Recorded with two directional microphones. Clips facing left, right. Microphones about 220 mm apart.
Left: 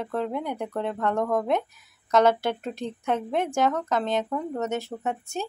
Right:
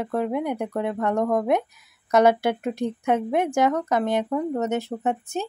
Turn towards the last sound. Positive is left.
turn(degrees=-15)  # may be behind; listen again after turning